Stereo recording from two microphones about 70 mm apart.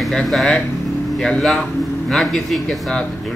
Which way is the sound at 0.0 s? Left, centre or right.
Centre.